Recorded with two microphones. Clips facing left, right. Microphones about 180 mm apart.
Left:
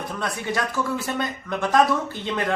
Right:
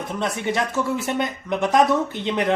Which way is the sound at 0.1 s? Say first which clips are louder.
Right 5 dB; 20° right (ahead or behind).